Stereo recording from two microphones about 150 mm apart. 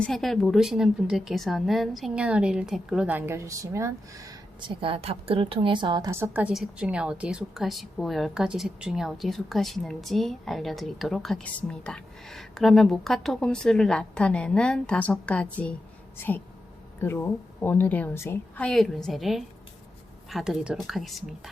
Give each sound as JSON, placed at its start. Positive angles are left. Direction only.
{"t": 0.0, "sound": "a woman's voice", "side_deg": 0}
{"t": 4.8, "sound": "a woman's voice", "side_deg": -40}
{"t": 6.1, "sound": "a woman's voice", "side_deg": -15}